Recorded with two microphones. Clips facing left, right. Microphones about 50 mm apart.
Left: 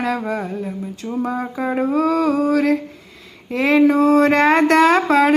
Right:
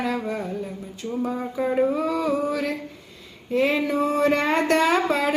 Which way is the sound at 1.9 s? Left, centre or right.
Left.